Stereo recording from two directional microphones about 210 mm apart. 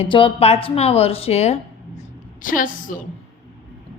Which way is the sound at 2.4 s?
40° left (ahead or behind).